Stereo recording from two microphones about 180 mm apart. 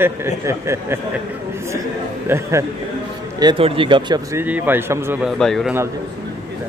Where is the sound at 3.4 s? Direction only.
30° right (ahead or behind).